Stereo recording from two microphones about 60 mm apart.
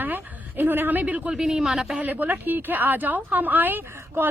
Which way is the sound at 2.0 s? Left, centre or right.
Right.